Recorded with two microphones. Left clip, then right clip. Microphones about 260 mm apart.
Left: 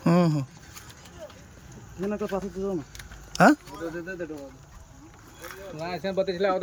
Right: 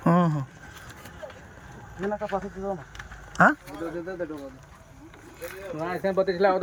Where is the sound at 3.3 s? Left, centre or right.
Left.